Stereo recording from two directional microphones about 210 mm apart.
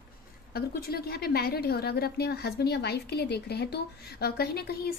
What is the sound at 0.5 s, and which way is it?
A woman's voice, 45° left (ahead or behind).